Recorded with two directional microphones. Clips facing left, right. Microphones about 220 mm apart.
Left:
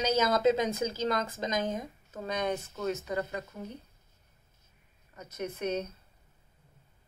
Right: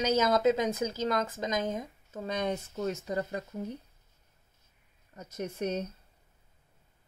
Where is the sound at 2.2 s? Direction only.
30° right (ahead or behind).